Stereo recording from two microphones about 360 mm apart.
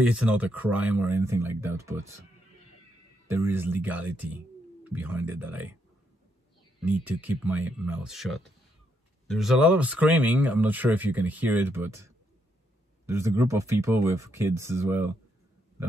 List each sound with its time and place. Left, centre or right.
0.0 s speech: centre
3.3 s speech: centre
6.8 s speech: centre